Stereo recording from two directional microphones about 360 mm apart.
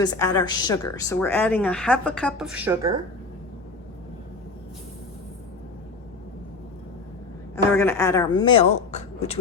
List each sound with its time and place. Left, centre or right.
0.0 s a woman's voice: centre
7.5 s a woman's voice: centre